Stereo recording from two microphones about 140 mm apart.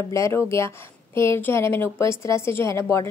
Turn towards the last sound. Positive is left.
turn(degrees=20)  # may be behind; listen again after turning